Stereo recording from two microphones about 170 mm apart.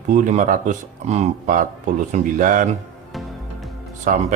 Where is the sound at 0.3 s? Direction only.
50° right (ahead or behind).